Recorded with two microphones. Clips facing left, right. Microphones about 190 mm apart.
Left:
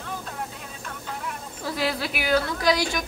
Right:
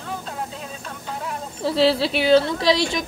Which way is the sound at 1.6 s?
25° right (ahead or behind).